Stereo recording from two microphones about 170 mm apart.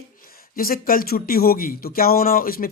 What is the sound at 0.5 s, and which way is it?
Speech, 60° left (ahead or behind).